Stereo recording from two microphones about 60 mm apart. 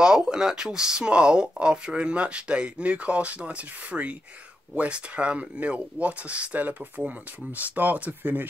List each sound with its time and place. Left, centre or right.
0.0 s speech: centre; by 8.5 s right